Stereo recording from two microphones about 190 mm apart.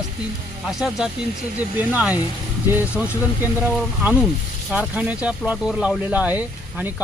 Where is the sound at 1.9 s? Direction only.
5° right (ahead or behind).